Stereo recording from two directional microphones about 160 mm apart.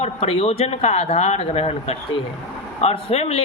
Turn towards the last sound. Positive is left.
turn(degrees=40)  # may be behind; listen again after turning